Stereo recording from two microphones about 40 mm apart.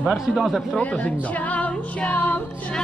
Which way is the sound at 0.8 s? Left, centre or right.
Left.